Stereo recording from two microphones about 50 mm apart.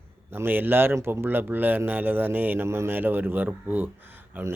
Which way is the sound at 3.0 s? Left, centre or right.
Right.